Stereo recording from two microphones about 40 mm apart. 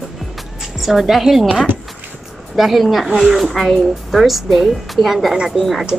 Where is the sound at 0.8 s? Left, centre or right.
Centre.